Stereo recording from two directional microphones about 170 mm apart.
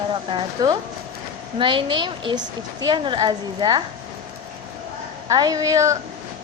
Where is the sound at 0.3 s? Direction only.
30° right (ahead or behind).